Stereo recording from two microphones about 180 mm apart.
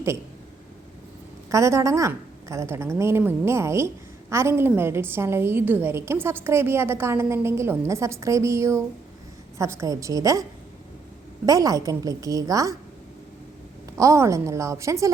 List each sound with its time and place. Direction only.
1.5 s a woman's voice: 15° right (ahead or behind)
11.4 s a woman's voice: 20° right (ahead or behind)
13.9 s a woman's voice: 15° right (ahead or behind)